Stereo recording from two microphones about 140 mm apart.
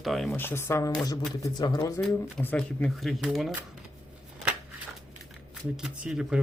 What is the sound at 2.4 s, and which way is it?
Speech, 10° left (ahead or behind).